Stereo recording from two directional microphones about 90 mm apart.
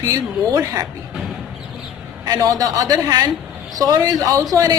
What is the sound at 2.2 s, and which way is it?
A woman's voice, 40° right (ahead or behind).